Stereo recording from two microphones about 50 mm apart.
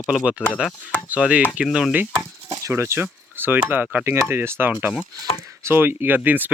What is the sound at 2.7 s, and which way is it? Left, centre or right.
Speech, right.